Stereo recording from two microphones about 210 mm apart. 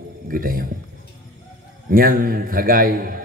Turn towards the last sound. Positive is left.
turn(degrees=-40)  # may be behind; listen again after turning